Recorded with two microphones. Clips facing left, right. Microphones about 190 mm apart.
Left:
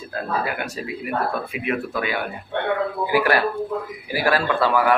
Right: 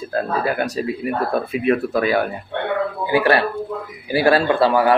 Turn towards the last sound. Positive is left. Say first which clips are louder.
# right 4 dB
turn(degrees=-30)  # may be behind; listen again after turning